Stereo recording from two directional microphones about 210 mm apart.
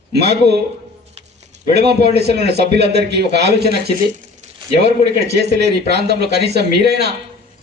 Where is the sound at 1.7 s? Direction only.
50° right (ahead or behind).